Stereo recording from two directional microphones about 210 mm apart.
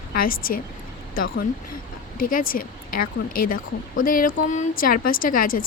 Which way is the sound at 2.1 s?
40° left (ahead or behind).